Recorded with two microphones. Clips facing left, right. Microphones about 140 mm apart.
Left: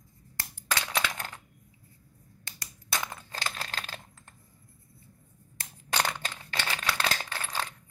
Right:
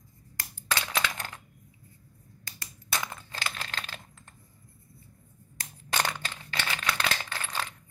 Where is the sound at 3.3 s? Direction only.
40° left (ahead or behind).